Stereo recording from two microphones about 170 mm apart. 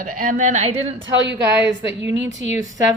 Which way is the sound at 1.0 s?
90° right.